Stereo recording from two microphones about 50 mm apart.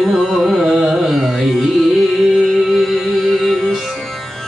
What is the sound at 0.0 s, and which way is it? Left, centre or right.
Carnatic music, centre.